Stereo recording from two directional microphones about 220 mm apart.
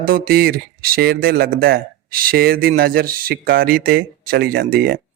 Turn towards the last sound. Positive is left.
turn(degrees=-45)  # may be behind; listen again after turning